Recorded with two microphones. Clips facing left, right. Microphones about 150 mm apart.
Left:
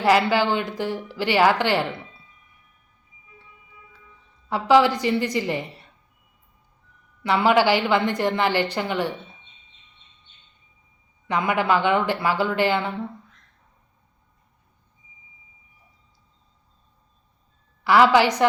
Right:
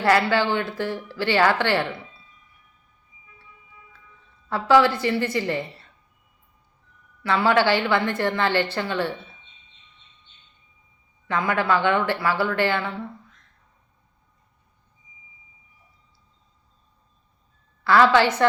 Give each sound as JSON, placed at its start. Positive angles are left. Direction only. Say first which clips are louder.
{"t": 0.0, "sound": "a woman's voice", "louder": "left 1 dB", "side_deg": 15}
{"t": 4.4, "sound": "a woman's voice", "louder": "left 1 dB", "side_deg": 15}
{"t": 7.2, "sound": "a woman's voice", "louder": "left 1 dB", "side_deg": 15}
{"t": 11.3, "sound": "a woman's voice", "louder": "left 1 dB", "side_deg": 15}
{"t": 17.8, "sound": "a woman's voice", "louder": "left 1 dB", "side_deg": 15}